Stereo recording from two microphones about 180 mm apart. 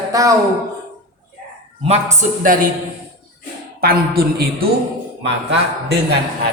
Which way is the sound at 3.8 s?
55° right (ahead or behind).